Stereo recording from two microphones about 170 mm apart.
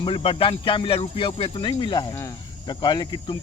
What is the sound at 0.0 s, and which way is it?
Speech, 30° left (ahead or behind).